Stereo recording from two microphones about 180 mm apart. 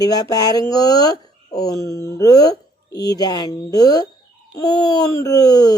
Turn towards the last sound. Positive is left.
turn(degrees=20)  # may be behind; listen again after turning